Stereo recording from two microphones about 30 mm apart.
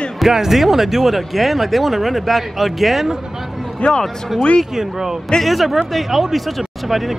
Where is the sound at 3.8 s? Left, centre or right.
Left.